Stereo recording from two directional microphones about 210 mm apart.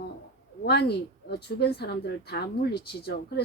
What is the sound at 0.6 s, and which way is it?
A woman's voice, 50° left (ahead or behind).